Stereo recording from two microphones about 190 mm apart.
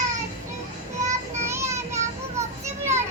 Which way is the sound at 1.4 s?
15° right (ahead or behind).